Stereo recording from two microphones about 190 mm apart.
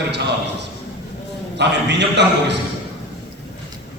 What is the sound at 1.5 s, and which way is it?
A man's voice, 65° right (ahead or behind).